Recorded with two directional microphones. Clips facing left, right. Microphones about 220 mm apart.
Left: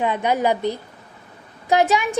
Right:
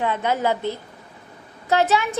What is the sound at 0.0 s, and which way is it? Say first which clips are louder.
A woman's voice: left 2 dB; 15° left (ahead or behind).